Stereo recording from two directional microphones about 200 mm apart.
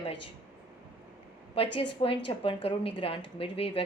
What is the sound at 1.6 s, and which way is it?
A woman's voice, 25° left (ahead or behind).